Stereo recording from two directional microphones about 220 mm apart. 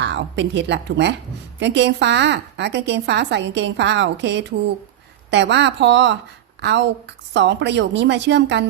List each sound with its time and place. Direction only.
0.0 s a woman's voice: 55° right (ahead or behind)